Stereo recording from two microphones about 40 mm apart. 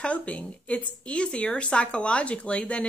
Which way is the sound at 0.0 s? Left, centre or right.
Left.